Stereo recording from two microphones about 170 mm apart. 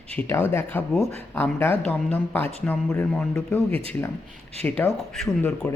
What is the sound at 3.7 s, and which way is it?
Speech, 35° right (ahead or behind).